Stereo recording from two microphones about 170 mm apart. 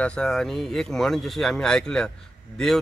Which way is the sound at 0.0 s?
5° left (ahead or behind).